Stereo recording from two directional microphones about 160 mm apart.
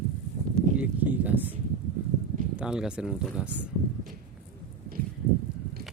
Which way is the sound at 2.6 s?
5° right (ahead or behind).